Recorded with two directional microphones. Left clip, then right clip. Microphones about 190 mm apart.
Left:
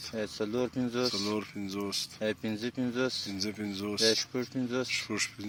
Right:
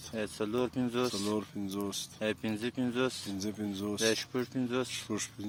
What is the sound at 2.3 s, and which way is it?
Speech, 10° left (ahead or behind).